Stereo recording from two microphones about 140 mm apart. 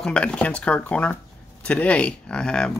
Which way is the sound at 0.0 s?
5° left (ahead or behind).